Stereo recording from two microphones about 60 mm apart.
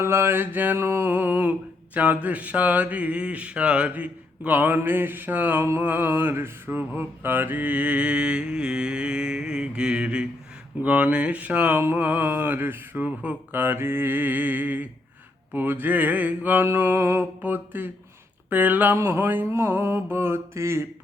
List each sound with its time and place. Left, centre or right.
0.0 s mantra: right
0.8 s speech: right
4.8 s mantra: right; by 10.2 s centre
10.8 s speech: right
11.8 s mantra: right
15.5 s speech: right
16.6 s mantra: right
17.4 s mantra: right
18.5 s speech: right
18.9 s mantra: right
19.5 s mantra: right